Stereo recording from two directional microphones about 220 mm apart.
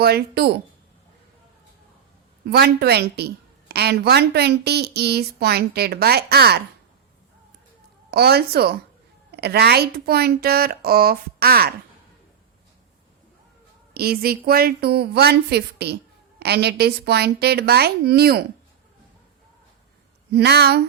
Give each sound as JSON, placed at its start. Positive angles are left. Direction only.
{"t": 0.0, "sound": "a woman's voice", "side_deg": -45}
{"t": 2.5, "sound": "a woman's voice", "side_deg": -45}
{"t": 8.1, "sound": "a woman's voice", "side_deg": -45}
{"t": 13.9, "sound": "a woman's voice", "side_deg": -45}
{"t": 20.3, "sound": "a woman's voice", "side_deg": -50}